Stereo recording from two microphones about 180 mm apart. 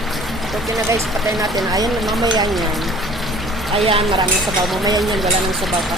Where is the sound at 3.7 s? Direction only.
35° right (ahead or behind).